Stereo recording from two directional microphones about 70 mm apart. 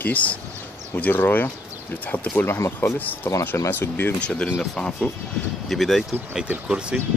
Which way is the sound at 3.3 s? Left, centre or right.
Left.